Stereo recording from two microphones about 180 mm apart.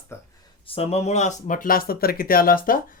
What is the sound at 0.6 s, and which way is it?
Speech, 30° left (ahead or behind).